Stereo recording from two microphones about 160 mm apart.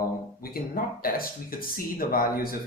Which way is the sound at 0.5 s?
65° left (ahead or behind).